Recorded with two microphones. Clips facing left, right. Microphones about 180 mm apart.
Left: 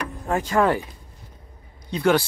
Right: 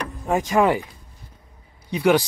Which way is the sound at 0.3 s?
15° right (ahead or behind).